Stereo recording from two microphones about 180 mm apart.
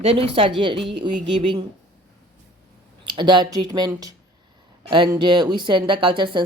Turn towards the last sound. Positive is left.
turn(degrees=-25)  # may be behind; listen again after turning